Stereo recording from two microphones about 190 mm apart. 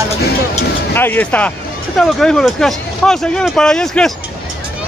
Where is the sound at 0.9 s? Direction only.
10° left (ahead or behind).